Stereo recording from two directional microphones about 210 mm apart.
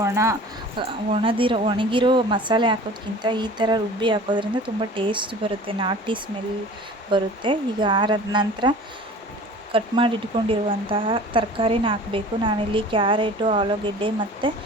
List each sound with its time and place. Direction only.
0.0 s speech: 15° right (ahead or behind)
0.8 s a woman's voice: 25° right (ahead or behind)
9.7 s a woman's voice: 25° right (ahead or behind)